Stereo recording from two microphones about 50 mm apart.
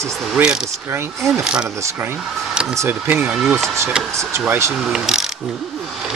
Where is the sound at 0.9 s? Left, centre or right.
Right.